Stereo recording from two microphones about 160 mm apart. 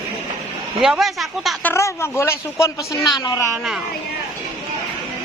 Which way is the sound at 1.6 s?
15° left (ahead or behind).